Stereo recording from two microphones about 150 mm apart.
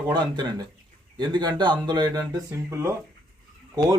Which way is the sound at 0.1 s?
30° right (ahead or behind).